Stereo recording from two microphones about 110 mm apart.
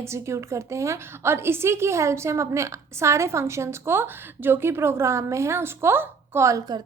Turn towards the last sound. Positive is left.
turn(degrees=-35)  # may be behind; listen again after turning